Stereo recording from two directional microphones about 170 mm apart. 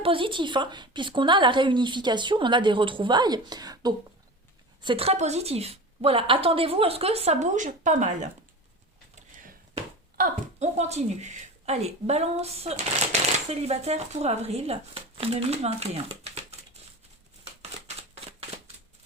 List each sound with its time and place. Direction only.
0.0 s a woman's voice: 30° right (ahead or behind)
10.6 s a woman's voice: 40° right (ahead or behind)
17.4 s a sound: 40° right (ahead or behind)